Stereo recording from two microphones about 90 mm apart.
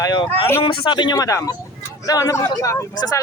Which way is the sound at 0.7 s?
70° left (ahead or behind).